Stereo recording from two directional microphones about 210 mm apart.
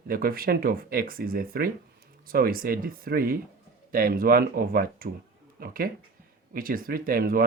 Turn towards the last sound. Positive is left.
turn(degrees=-45)  # may be behind; listen again after turning